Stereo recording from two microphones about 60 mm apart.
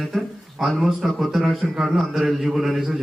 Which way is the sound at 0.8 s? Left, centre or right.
Centre.